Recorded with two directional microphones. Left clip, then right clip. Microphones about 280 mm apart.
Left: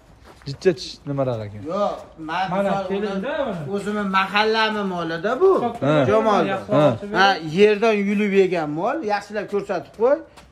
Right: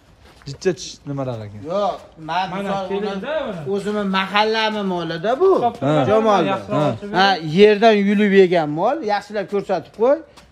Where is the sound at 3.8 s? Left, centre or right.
Right.